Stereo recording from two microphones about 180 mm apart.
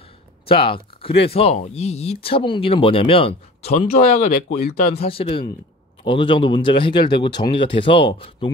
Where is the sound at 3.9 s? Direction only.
55° left (ahead or behind).